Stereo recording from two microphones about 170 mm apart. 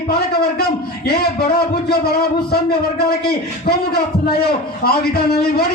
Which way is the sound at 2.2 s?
65° left (ahead or behind).